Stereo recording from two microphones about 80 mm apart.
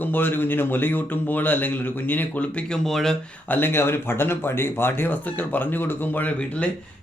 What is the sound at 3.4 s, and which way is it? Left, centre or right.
Speech, left.